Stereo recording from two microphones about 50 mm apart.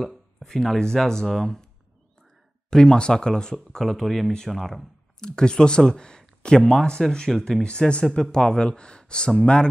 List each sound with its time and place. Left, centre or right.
0.0 s speech: centre
2.7 s speech: centre
5.2 s speech: centre